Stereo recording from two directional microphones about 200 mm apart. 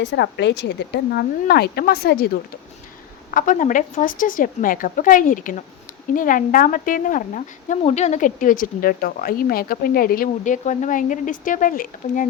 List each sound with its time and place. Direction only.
0.0 s speech: 60° left (ahead or behind)
3.3 s a woman's voice: 40° left (ahead or behind)